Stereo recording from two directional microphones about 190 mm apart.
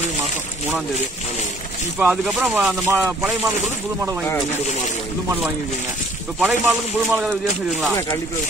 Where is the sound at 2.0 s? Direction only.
5° right (ahead or behind).